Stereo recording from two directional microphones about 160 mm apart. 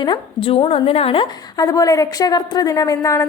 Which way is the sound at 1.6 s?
20° left (ahead or behind).